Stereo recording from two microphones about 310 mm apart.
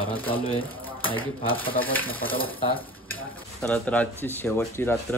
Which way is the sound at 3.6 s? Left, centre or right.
Centre.